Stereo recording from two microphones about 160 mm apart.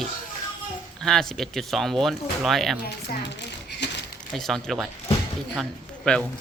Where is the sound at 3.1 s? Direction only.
90° left.